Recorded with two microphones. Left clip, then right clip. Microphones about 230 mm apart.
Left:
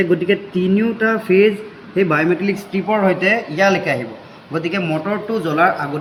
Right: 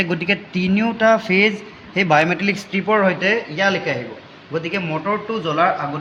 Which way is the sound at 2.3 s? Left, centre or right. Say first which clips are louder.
Left 1 dB; right.